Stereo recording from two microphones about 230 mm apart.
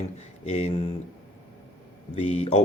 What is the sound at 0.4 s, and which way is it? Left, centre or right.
Speech, left.